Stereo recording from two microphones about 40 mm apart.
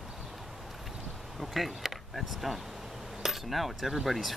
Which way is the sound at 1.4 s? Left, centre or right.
Centre.